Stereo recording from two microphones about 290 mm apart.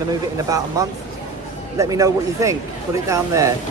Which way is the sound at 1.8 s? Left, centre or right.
Centre.